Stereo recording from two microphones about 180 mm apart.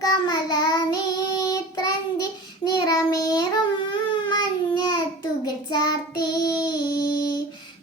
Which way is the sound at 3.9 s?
25° left (ahead or behind).